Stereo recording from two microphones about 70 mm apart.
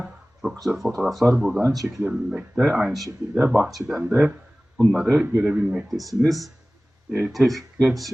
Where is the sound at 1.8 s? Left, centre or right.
Centre.